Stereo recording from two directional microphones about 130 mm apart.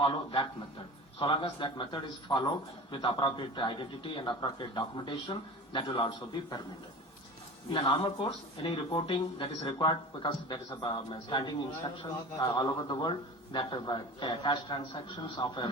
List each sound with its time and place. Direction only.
0.0 s a man's voice: 40° left (ahead or behind)
7.7 s a man's voice: 40° left (ahead or behind)